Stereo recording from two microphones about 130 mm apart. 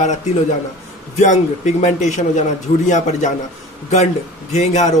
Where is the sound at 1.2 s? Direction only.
65° left (ahead or behind).